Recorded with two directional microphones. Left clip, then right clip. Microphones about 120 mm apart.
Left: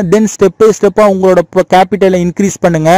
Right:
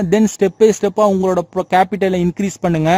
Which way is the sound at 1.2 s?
25° left (ahead or behind).